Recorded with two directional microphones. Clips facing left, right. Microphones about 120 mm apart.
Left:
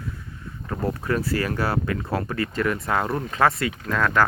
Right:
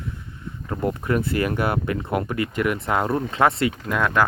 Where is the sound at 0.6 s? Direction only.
20° right (ahead or behind).